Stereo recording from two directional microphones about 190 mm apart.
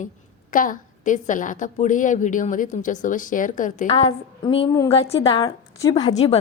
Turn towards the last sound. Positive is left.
turn(degrees=30)  # may be behind; listen again after turning